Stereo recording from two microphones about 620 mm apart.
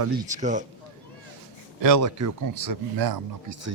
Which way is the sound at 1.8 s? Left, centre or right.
Right.